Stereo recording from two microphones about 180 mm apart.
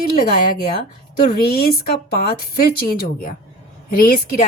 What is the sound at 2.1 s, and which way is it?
Speech, 55° left (ahead or behind).